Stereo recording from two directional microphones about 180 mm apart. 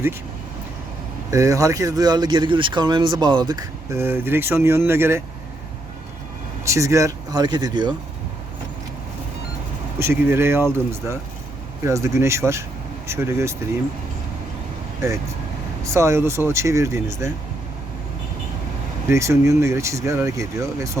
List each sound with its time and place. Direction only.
1.3 s speech: 20° right (ahead or behind)
6.7 s speech: 15° right (ahead or behind)
10.0 s speech: 15° right (ahead or behind)
15.8 s speech: 15° right (ahead or behind)
19.0 s speech: 15° right (ahead or behind)